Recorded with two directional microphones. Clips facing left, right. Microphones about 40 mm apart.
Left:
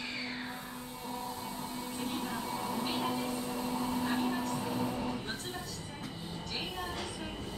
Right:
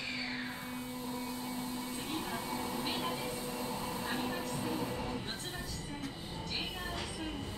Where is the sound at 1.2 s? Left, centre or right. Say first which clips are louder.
Even; centre.